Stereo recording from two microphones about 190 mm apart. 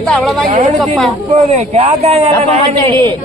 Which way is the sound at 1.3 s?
35° right (ahead or behind).